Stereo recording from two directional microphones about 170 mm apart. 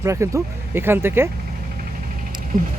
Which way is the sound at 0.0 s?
15° right (ahead or behind).